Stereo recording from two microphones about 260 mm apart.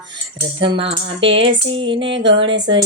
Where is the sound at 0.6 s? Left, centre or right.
Centre.